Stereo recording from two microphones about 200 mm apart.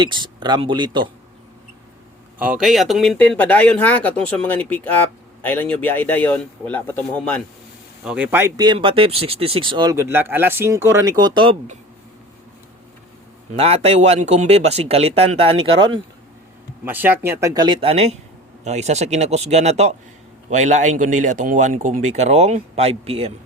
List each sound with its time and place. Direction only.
0.0 s speech: 25° right (ahead or behind)
2.4 s speech: 5° right (ahead or behind)
8.0 s speech: 5° right (ahead or behind); by 11.8 s 25° right (ahead or behind)
13.6 s speech: 30° right (ahead or behind)
16.8 s speech: 10° right (ahead or behind); by 23.3 s 30° right (ahead or behind)